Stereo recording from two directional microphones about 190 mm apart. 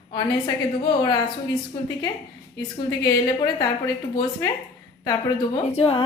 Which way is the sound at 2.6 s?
20° left (ahead or behind).